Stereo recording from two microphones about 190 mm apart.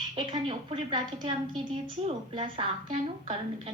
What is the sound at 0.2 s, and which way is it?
A woman's voice, 25° right (ahead or behind).